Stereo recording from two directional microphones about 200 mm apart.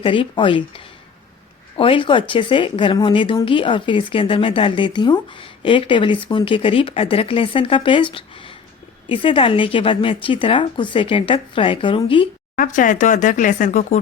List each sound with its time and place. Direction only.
0.0 s speech: 25° left (ahead or behind)
12.5 s speech: 40° left (ahead or behind)